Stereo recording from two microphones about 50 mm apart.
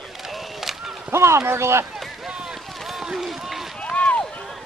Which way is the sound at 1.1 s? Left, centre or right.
Right.